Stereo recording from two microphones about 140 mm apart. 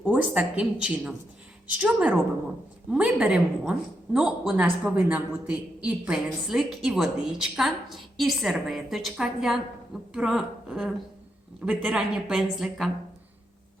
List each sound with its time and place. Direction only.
0.0 s a woman's voice: 5° right (ahead or behind)